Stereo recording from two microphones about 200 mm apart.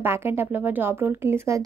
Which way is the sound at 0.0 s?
10° right (ahead or behind).